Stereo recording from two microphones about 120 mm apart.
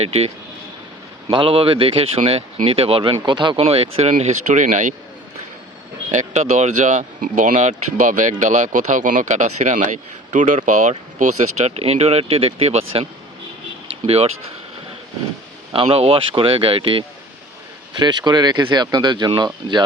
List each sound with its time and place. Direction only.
0.0 s speech: 60° right (ahead or behind)
1.3 s speech: 45° right (ahead or behind)
3.6 s speech: 55° right (ahead or behind); by 4.9 s 90° right
6.1 s speech: 75° right (ahead or behind); by 14.3 s 60° right (ahead or behind)
15.7 s speech: 50° right (ahead or behind)
18.0 s speech: 35° right (ahead or behind)